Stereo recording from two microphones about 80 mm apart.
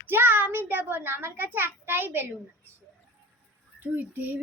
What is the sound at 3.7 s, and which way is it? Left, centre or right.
Speech, right.